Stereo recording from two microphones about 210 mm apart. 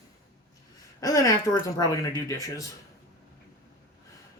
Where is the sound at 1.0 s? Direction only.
15° left (ahead or behind).